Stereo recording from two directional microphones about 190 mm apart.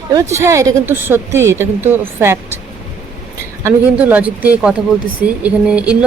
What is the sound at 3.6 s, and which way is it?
Speech, 10° right (ahead or behind).